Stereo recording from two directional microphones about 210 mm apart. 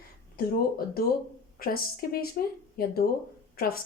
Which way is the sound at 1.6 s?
45° left (ahead or behind).